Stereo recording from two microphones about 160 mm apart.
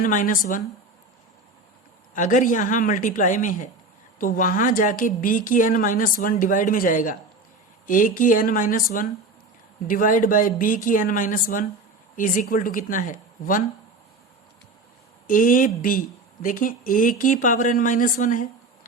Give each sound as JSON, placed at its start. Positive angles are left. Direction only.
{"t": 0.0, "sound": "speech", "side_deg": 55}
{"t": 2.1, "sound": "speech", "side_deg": 55}
{"t": 15.3, "sound": "speech", "side_deg": 60}